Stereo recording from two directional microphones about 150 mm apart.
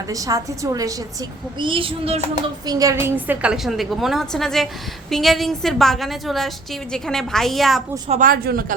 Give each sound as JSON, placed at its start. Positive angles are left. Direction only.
{"t": 0.1, "sound": "a woman's voice", "side_deg": -20}
{"t": 1.5, "sound": "speech", "side_deg": -35}
{"t": 2.6, "sound": "a woman's voice", "side_deg": -25}
{"t": 8.2, "sound": "a man's voice", "side_deg": -80}